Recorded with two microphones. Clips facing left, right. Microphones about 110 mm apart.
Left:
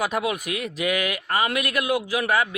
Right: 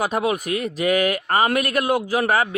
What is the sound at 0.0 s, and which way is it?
Speech, 40° right (ahead or behind).